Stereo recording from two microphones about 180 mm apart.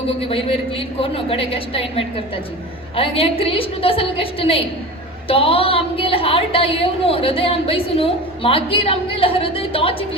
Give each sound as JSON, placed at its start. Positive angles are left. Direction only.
{"t": 0.2, "sound": "a woman's voice", "side_deg": 30}